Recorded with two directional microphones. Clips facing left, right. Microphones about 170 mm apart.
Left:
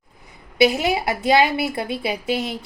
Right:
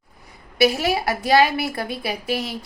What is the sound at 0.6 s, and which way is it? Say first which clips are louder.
A woman's voice: left 1 dB; 20° left (ahead or behind).